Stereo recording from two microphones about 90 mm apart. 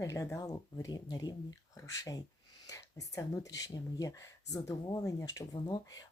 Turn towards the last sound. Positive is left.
turn(degrees=45)  # may be behind; listen again after turning